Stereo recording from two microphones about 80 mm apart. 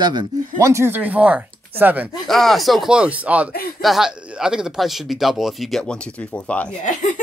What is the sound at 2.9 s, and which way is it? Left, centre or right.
Speech, centre.